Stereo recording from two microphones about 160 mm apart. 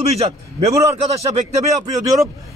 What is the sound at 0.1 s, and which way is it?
Speech, 40° right (ahead or behind).